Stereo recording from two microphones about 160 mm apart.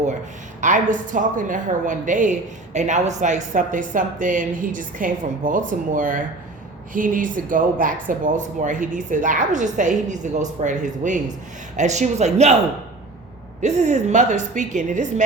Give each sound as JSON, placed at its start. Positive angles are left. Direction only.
{"t": 0.6, "sound": "speech", "side_deg": -50}
{"t": 13.6, "sound": "speech", "side_deg": -45}